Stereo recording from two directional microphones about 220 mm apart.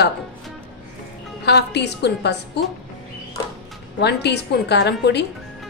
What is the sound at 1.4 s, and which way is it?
Speech, 50° left (ahead or behind).